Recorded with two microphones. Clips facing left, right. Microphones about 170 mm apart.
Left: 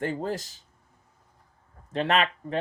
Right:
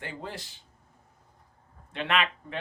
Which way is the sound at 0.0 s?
45° left (ahead or behind).